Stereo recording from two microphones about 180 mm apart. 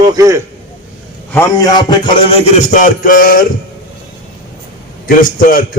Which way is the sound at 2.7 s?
45° left (ahead or behind).